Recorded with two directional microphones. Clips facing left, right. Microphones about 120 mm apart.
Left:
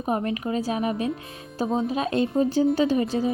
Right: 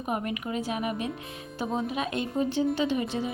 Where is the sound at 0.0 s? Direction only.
35° left (ahead or behind).